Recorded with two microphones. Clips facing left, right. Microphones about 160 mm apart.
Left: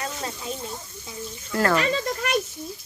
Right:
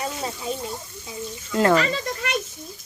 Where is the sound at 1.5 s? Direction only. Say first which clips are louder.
Right 4 dB; 20° right (ahead or behind).